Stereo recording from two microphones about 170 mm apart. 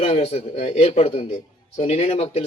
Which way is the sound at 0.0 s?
35° left (ahead or behind).